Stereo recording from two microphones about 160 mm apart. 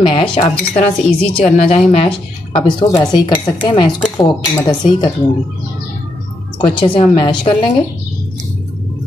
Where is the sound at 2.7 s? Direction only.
30° left (ahead or behind).